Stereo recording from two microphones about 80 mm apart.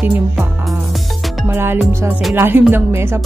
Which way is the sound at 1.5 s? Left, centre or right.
Right.